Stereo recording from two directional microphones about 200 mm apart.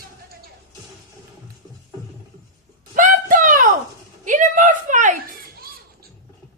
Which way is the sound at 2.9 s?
40° right (ahead or behind).